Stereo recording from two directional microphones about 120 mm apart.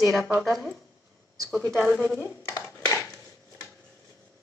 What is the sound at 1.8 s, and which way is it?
Speech, 15° left (ahead or behind).